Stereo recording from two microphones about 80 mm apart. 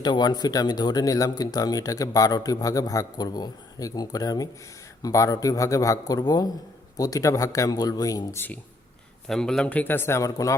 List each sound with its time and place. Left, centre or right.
0.0 s speech: left
8.3 s speech: left
9.2 s a man's voice: centre
9.7 s speech: left